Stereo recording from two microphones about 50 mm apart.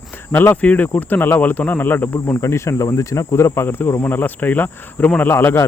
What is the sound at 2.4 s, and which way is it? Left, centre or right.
Speech, left.